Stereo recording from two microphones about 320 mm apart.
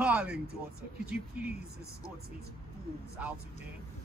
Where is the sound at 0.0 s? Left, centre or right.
Centre.